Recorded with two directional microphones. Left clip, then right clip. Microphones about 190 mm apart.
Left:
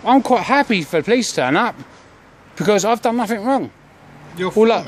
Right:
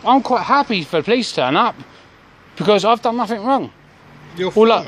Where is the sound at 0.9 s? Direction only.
5° left (ahead or behind).